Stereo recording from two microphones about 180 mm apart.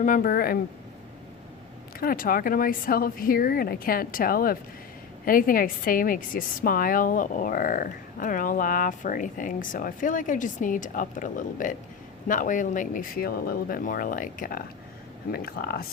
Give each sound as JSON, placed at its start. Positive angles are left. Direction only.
{"t": 0.0, "sound": "a woman's voice", "side_deg": 50}
{"t": 2.0, "sound": "a woman's voice", "side_deg": 55}